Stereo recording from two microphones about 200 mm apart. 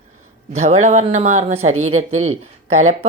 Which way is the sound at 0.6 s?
35° right (ahead or behind).